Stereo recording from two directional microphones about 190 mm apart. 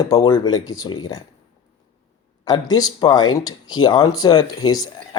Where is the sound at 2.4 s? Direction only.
20° left (ahead or behind).